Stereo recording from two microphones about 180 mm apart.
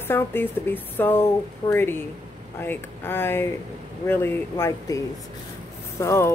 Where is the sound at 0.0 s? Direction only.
10° left (ahead or behind).